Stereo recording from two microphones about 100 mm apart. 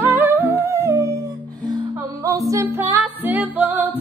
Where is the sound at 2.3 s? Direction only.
30° right (ahead or behind).